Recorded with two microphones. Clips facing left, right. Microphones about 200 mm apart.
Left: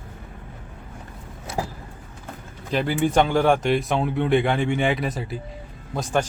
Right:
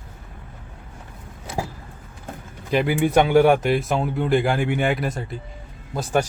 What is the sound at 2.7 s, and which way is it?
Speech, 10° right (ahead or behind).